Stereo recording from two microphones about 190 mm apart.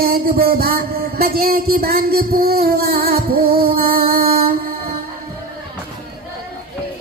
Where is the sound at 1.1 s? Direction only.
55° right (ahead or behind).